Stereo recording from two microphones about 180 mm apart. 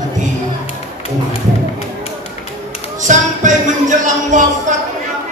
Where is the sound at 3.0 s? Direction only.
45° right (ahead or behind).